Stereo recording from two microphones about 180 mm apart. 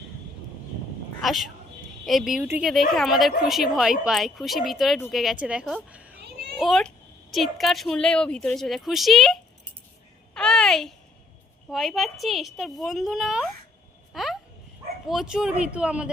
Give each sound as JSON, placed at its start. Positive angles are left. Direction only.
{"t": 1.2, "sound": "a woman's voice", "side_deg": 0}
{"t": 10.3, "sound": "babbling", "side_deg": 5}
{"t": 11.7, "sound": "speech", "side_deg": 0}
{"t": 14.1, "sound": "a sound", "side_deg": 0}
{"t": 15.0, "sound": "speech", "side_deg": 0}